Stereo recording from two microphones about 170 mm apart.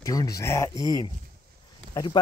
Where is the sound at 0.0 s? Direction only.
20° left (ahead or behind).